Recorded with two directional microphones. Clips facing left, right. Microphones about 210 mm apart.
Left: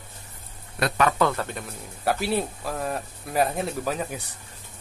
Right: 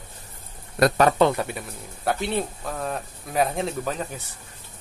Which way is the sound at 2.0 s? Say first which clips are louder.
Even; 5° left (ahead or behind).